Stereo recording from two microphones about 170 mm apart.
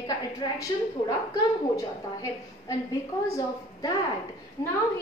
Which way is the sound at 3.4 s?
20° left (ahead or behind).